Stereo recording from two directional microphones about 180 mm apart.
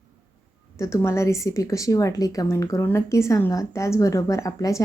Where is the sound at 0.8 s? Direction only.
15° left (ahead or behind).